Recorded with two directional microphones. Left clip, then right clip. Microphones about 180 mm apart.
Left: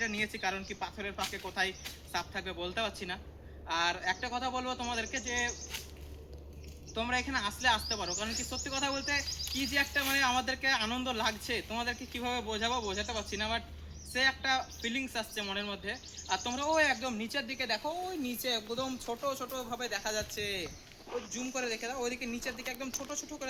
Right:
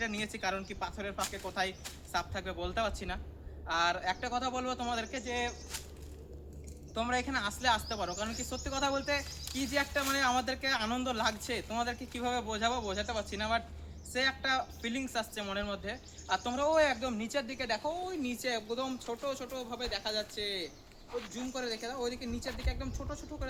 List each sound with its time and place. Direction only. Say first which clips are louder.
0.0 s speech: left 2 dB; 10° right (ahead or behind)
6.9 s speech: even; 15° right (ahead or behind)
18.1 s speech: even; 40° left (ahead or behind); by 23.5 s 20° left (ahead or behind)